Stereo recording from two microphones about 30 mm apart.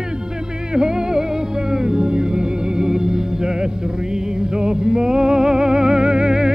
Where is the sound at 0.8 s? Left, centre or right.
Right.